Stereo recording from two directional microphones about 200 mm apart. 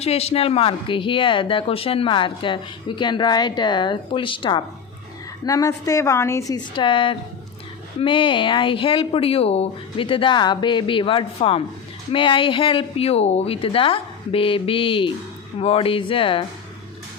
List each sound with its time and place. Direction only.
0.0 s a woman's voice: 30° left (ahead or behind); by 6.6 s 15° left (ahead or behind)
6.7 s a woman's voice: 25° left (ahead or behind)